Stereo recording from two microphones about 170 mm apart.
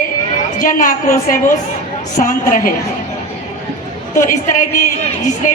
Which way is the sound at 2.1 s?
50° left (ahead or behind).